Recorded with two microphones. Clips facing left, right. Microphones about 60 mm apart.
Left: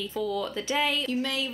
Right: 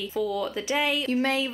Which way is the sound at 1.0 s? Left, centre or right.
Right.